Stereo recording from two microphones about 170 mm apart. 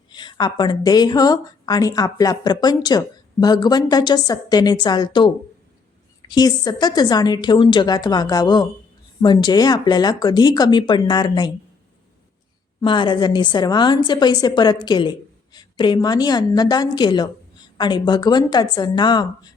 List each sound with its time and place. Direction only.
0.1 s speech: 25° left (ahead or behind)
12.8 s speech: 30° left (ahead or behind)